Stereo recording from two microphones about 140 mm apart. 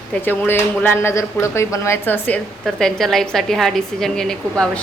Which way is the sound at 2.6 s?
5° left (ahead or behind).